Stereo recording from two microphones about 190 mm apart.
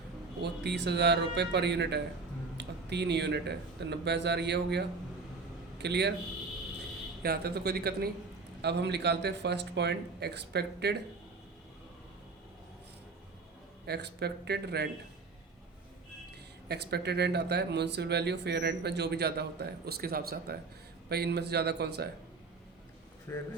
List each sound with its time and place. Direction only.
0.6 s speech: 60° right (ahead or behind)
7.2 s speech: 55° right (ahead or behind)
13.8 s speech: 60° right (ahead or behind)
16.6 s speech: 60° right (ahead or behind)
23.3 s speech: 15° left (ahead or behind)